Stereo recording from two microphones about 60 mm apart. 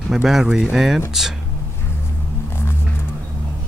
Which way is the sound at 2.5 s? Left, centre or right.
Left.